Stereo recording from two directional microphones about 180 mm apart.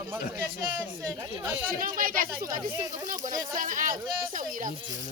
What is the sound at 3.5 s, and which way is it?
Speech, 45° right (ahead or behind).